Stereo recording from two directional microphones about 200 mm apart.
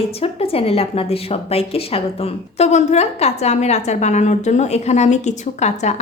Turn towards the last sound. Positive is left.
turn(degrees=35)  # may be behind; listen again after turning